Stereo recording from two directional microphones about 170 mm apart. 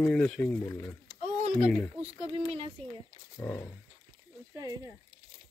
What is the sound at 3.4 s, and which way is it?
Speech, 15° left (ahead or behind).